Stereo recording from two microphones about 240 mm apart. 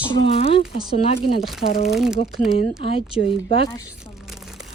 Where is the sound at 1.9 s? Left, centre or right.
Centre.